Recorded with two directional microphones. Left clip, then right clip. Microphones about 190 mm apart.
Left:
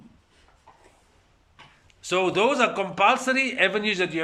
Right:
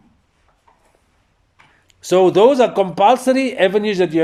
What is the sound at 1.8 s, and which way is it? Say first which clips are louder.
A man's voice: right 11 dB; 35° right (ahead or behind).